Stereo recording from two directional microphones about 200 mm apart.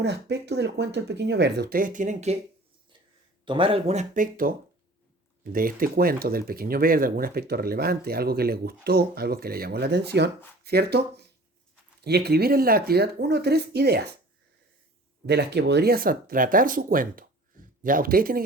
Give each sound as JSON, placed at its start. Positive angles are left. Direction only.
{"t": 0.0, "sound": "speech", "side_deg": -60}
{"t": 3.4, "sound": "speech", "side_deg": -25}
{"t": 15.3, "sound": "speech", "side_deg": -55}